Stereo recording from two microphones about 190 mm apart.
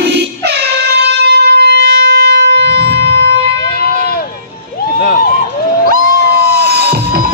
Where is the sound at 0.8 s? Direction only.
60° right (ahead or behind).